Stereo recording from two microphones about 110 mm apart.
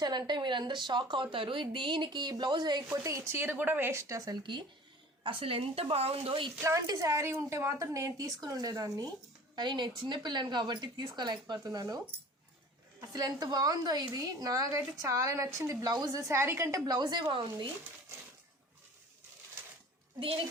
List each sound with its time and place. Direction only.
0.0 s speech: 40° right (ahead or behind)
3.0 s a woman's voice: 30° right (ahead or behind)
5.2 s speech: 55° right (ahead or behind)
6.6 s a woman's voice: 30° right (ahead or behind)
9.6 s a woman's voice: 45° right (ahead or behind)
13.0 s a woman's voice: 35° right (ahead or behind); by 17.7 s 50° right (ahead or behind)
20.1 s speech: 55° right (ahead or behind)